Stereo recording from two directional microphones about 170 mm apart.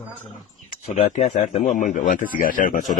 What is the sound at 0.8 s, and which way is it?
Speech, 45° left (ahead or behind).